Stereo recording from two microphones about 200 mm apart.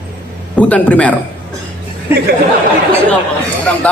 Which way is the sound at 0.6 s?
5° left (ahead or behind).